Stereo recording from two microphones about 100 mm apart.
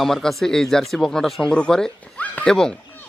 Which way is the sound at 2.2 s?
15° left (ahead or behind).